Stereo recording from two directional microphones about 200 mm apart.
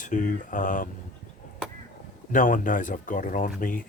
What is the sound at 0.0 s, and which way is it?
Speech, 40° left (ahead or behind).